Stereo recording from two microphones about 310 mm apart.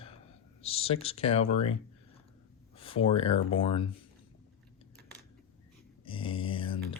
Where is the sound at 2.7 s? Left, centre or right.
Centre.